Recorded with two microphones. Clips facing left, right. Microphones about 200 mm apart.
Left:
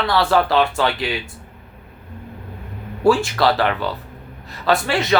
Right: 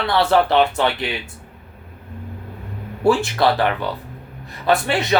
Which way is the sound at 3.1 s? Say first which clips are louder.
Left 1 dB; 20° right (ahead or behind).